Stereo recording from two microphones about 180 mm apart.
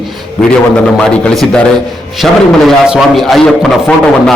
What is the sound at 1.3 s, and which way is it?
Speech, 5° left (ahead or behind).